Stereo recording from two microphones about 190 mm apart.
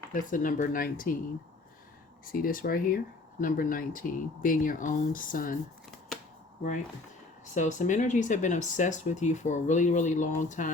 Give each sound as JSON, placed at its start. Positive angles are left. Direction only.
{"t": 0.1, "sound": "speech", "side_deg": 45}
{"t": 2.2, "sound": "speech", "side_deg": 50}
{"t": 7.5, "sound": "speech", "side_deg": 40}